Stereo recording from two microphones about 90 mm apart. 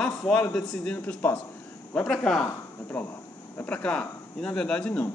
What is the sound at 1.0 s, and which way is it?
Speech, 20° left (ahead or behind).